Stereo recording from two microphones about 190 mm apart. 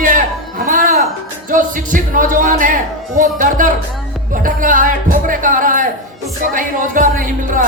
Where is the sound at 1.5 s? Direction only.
45° right (ahead or behind).